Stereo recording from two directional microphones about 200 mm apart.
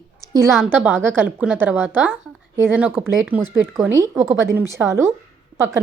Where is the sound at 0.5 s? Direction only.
5° right (ahead or behind).